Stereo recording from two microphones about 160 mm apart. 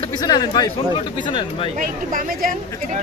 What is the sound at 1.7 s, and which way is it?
Speech, 60° right (ahead or behind).